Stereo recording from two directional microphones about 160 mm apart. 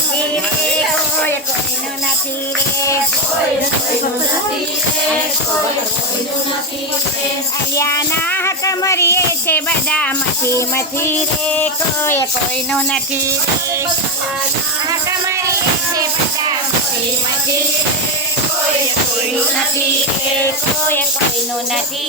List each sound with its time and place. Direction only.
7.8 s music: 20° left (ahead or behind)